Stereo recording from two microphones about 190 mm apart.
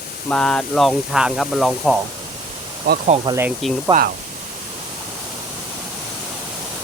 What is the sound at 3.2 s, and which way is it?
Speech, 15° right (ahead or behind).